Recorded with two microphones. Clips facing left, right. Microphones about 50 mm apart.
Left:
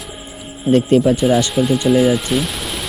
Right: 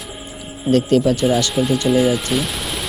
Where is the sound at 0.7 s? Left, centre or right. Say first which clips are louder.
Left 2 dB; left.